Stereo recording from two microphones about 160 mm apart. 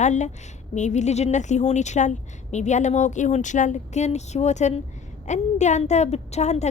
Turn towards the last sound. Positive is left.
turn(degrees=45)  # may be behind; listen again after turning